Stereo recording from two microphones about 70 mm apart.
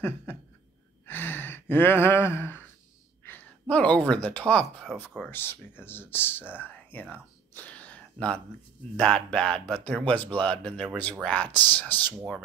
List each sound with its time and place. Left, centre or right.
0.3 s a sound: left
1.0 s gasp: left
3.3 s speech: left
5.3 s speech: left
7.5 s a sound: centre
8.9 s speech: centre